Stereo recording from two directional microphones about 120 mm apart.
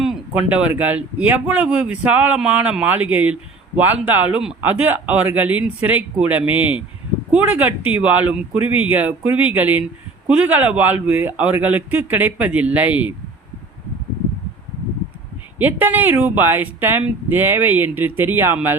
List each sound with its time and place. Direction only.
0.0 s speech: 10° right (ahead or behind)
15.5 s speech: 15° right (ahead or behind)